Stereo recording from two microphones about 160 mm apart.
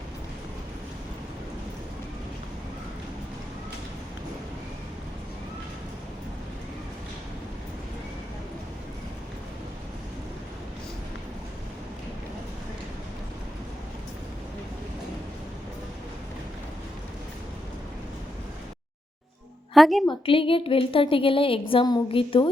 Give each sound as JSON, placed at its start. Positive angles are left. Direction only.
{"t": 19.7, "sound": "a woman's voice", "side_deg": 0}
{"t": 20.1, "sound": "speech", "side_deg": 35}